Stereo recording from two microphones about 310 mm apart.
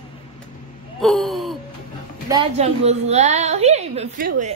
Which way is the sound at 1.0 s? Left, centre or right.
Centre.